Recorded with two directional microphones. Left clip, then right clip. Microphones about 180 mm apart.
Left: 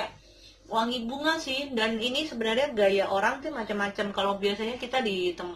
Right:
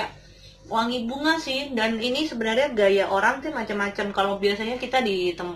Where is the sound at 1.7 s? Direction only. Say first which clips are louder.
Right 3 dB; 20° left (ahead or behind).